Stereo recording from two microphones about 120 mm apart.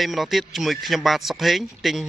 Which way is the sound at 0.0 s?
Centre (ahead or behind).